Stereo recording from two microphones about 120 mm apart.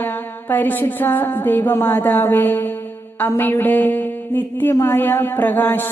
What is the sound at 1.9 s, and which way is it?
Music, 15° left (ahead or behind).